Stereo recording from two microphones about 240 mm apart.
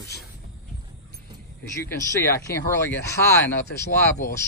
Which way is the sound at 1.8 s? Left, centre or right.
Centre.